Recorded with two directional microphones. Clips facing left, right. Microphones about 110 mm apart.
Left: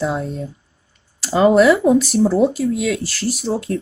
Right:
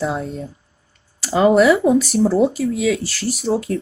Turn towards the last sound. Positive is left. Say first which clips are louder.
# right 1 dB
turn(degrees=0)  # may be behind; listen again after turning